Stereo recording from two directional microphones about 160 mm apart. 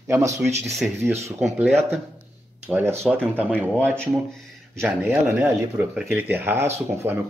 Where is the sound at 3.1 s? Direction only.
5° right (ahead or behind).